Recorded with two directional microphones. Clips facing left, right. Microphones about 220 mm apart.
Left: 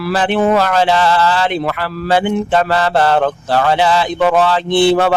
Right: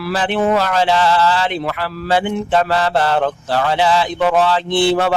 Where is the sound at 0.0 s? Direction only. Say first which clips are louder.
Left 3 dB; 55° left (ahead or behind).